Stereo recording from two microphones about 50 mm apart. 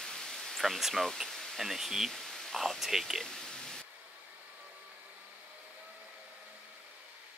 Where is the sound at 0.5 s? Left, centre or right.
Centre.